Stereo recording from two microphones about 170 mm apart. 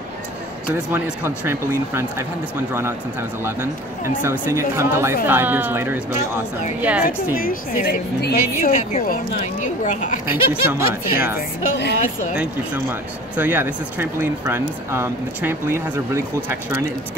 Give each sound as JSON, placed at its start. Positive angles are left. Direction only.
{"t": 0.9, "sound": "speech", "side_deg": -10}
{"t": 4.2, "sound": "speech", "side_deg": -15}
{"t": 7.3, "sound": "a woman's voice", "side_deg": 60}
{"t": 9.1, "sound": "speech", "side_deg": 50}
{"t": 10.5, "sound": "speech", "side_deg": -10}
{"t": 11.3, "sound": "a woman's voice", "side_deg": 75}
{"t": 12.4, "sound": "speech", "side_deg": -10}